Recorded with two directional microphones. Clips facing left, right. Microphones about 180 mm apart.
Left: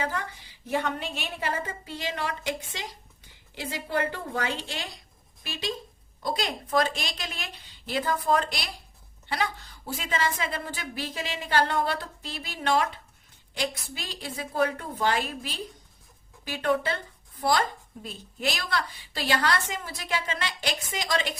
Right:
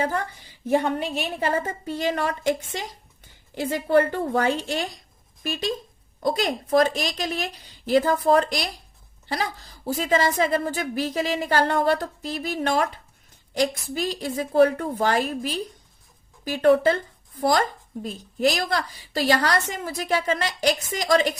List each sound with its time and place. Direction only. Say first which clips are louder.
0.7 s a woman's voice: right 7 dB; 45° right (ahead or behind)
18.0 s a woman's voice: right 9 dB; 40° right (ahead or behind)